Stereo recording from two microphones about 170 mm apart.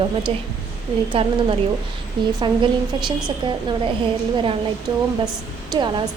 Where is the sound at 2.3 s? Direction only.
25° right (ahead or behind).